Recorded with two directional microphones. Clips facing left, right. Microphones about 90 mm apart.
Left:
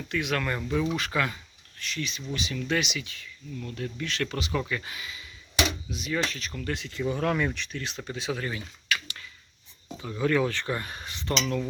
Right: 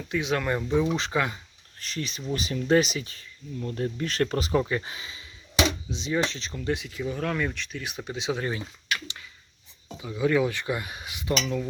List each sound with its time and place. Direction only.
0.1 s speech: 20° right (ahead or behind)
1.8 s speech: 40° right (ahead or behind)
4.6 s speech: 30° right (ahead or behind)
10.0 s speech: 10° right (ahead or behind)